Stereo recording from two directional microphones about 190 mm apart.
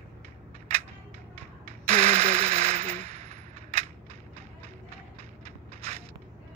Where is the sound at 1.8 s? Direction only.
35° right (ahead or behind).